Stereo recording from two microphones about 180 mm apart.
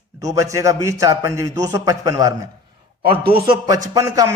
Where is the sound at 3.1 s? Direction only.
30° right (ahead or behind).